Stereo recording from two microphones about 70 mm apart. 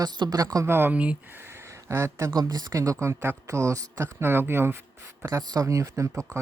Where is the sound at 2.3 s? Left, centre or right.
Right.